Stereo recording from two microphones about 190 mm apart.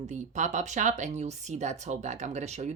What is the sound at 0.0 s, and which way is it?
Speech, 40° right (ahead or behind).